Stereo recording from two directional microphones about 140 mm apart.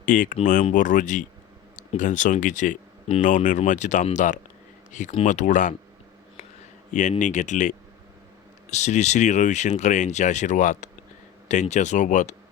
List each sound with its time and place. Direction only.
0.0 s speech: 75° left (ahead or behind)
7.2 s speech: 60° left (ahead or behind)